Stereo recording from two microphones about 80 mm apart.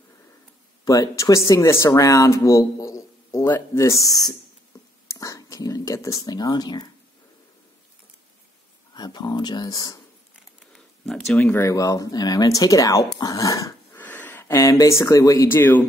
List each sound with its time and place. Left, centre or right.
0.8 s speech: left
3.7 s speech: left
5.0 s whispering: left
8.9 s speech: left
10.6 s a sound: centre
11.3 s speech: left
11.7 s speech: left
13.9 s a sound: left
14.5 s speech: left
15.4 s speech: left